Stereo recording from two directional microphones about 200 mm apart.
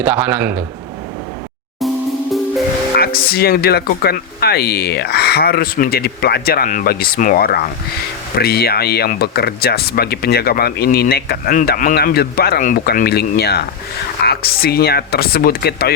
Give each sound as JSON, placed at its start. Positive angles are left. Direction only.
{"t": 0.0, "sound": "a man's voice", "side_deg": -10}
{"t": 2.9, "sound": "speech", "side_deg": 50}